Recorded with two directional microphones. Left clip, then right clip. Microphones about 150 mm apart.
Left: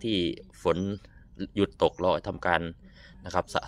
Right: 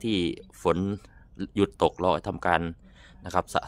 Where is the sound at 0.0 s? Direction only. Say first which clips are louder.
Right 1 dB; 45° right (ahead or behind).